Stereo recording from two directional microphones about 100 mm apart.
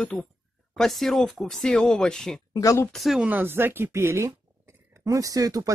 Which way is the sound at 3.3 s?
20° right (ahead or behind).